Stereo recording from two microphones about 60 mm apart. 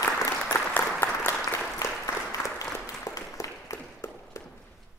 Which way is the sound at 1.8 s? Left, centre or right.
Left.